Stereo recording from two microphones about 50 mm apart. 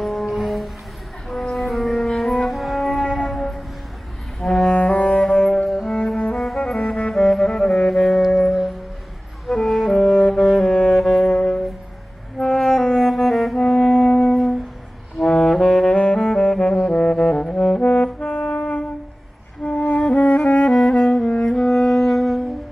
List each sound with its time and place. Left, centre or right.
0.0 s music: centre
4.7 s music: left
5.0 s music: centre
5.7 s cello: centre
6.3 s music: centre
15.1 s saxophone: centre
17.7 s brass instrument: left
19.8 s music: left
20.7 s saxophone: centre
21.2 s music: centre